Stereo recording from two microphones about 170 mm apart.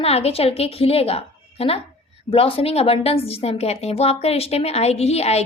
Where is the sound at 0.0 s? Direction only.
35° left (ahead or behind).